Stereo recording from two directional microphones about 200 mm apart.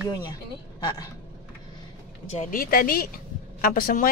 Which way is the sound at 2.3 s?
40° left (ahead or behind).